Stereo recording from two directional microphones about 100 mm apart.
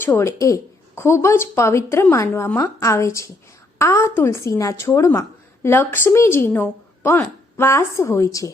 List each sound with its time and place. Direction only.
0.0 s a woman's voice: 25° left (ahead or behind)